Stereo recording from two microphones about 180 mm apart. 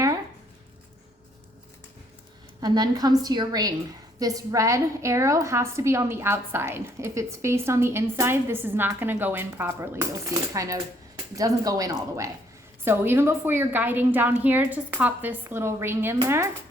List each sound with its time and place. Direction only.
2.6 s a woman's voice: 20° right (ahead or behind)